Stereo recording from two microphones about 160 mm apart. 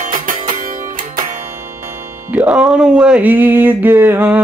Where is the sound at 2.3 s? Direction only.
5° right (ahead or behind).